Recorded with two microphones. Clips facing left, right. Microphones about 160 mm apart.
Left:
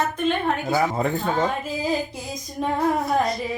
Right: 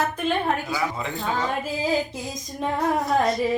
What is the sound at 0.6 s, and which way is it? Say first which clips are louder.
Speech: left 6 dB; 45° left (ahead or behind).